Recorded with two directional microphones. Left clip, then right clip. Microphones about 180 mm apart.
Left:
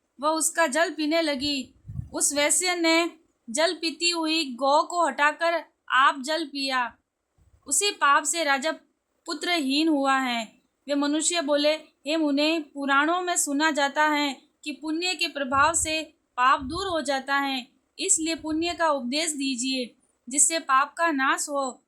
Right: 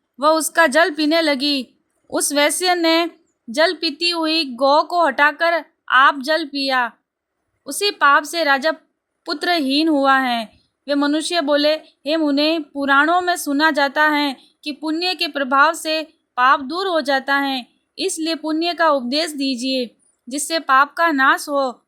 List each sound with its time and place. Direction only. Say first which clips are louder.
0.2 s a woman's voice: right 9 dB; 40° right (ahead or behind)